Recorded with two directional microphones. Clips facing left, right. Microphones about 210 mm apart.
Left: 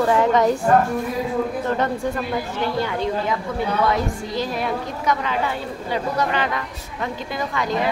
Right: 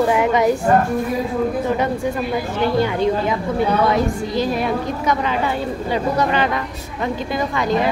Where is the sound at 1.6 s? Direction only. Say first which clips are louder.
Right 2 dB; 10° right (ahead or behind).